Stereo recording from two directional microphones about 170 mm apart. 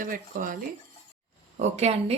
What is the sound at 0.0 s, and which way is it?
Speech, 55° right (ahead or behind).